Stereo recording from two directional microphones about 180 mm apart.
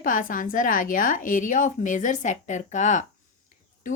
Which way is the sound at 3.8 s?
45° left (ahead or behind).